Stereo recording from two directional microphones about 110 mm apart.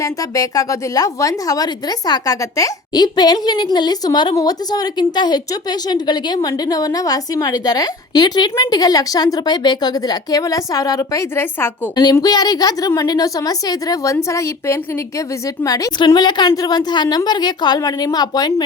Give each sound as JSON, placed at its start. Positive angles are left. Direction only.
{"t": 0.0, "sound": "a woman's voice", "side_deg": 30}
{"t": 12.2, "sound": "a woman's voice", "side_deg": 35}